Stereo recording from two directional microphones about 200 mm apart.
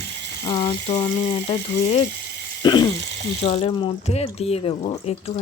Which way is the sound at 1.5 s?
30° left (ahead or behind).